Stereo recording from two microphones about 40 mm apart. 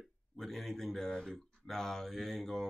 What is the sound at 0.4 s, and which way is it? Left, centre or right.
Speech, centre.